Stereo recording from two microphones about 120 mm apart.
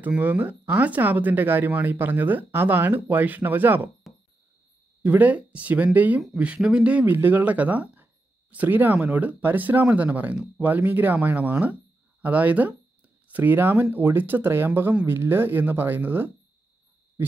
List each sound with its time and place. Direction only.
0.0 s speech: 15° right (ahead or behind)
5.0 s speech: 15° right (ahead or behind)